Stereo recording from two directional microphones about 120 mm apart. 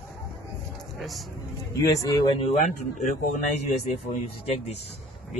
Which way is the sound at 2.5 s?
80° left.